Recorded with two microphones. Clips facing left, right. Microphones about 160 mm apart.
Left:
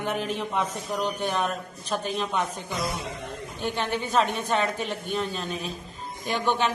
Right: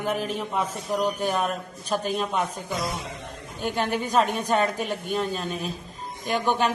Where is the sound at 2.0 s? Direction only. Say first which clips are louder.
Right 1 dB; 40° right (ahead or behind).